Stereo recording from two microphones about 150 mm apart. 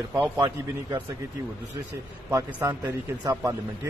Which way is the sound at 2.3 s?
20° right (ahead or behind).